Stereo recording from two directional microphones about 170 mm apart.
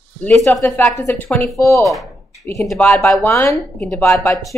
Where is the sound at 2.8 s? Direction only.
15° left (ahead or behind).